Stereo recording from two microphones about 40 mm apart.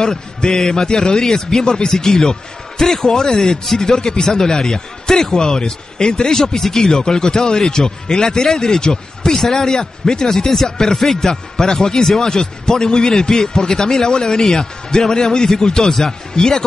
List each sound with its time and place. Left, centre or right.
0.0 s speech: centre